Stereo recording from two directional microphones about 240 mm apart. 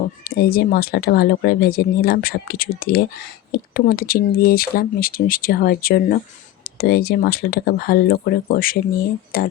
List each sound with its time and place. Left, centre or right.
0.3 s speech: left